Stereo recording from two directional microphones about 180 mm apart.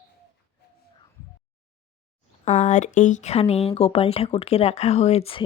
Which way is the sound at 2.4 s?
40° left (ahead or behind).